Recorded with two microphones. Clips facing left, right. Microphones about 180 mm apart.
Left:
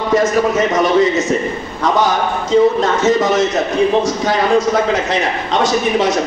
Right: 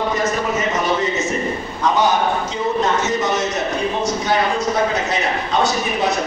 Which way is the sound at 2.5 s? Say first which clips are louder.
Left 7 dB; 90° left.